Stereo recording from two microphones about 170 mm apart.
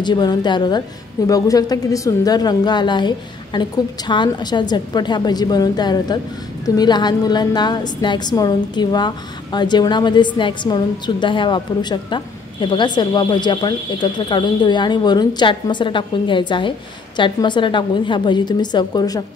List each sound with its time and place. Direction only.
0.0 s a woman's voice: 25° left (ahead or behind)